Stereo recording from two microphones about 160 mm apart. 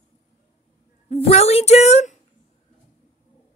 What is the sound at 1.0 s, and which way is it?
A woman's voice, 40° left (ahead or behind).